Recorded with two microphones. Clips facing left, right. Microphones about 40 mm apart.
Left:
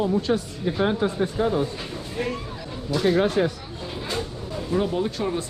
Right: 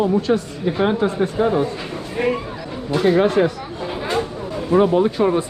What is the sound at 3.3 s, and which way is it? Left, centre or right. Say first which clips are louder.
Speech: right 6 dB; right.